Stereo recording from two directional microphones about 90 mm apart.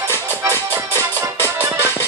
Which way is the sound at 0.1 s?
25° left (ahead or behind).